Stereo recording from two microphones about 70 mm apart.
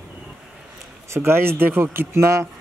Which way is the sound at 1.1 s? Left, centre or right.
Right.